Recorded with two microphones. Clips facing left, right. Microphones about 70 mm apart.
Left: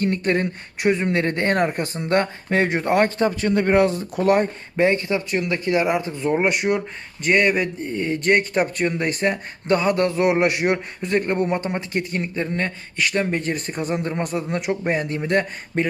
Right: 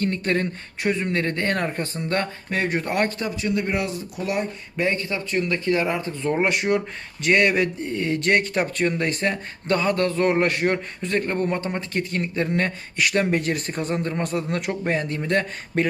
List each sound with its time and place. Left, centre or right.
0.0 s speech: centre
3.2 s speech: left
4.8 s speech: left; by 15.9 s centre